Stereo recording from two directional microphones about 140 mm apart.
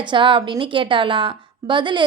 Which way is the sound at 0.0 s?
35° right (ahead or behind).